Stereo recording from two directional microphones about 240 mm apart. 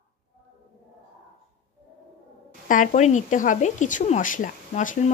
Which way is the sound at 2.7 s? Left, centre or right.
Left.